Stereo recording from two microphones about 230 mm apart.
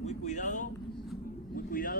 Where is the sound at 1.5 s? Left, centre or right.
Left.